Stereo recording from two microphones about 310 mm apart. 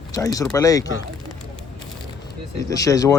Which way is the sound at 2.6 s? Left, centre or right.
Centre.